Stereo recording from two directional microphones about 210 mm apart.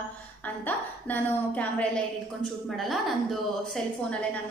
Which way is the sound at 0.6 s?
10° left (ahead or behind).